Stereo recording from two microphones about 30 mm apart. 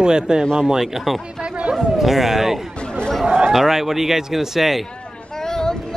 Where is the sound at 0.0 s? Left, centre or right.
Right.